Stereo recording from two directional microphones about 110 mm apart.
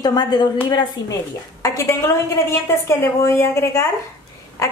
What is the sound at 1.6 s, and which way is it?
A woman's voice, 30° left (ahead or behind).